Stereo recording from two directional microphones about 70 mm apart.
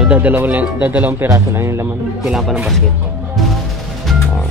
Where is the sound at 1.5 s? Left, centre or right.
Right.